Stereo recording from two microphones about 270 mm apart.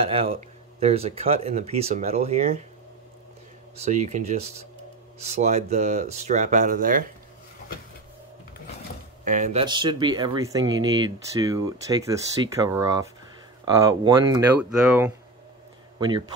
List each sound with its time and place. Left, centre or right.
0.0 s speech: right
3.7 s speech: right
9.2 s speech: right; by 12.2 s centre
13.7 s speech: centre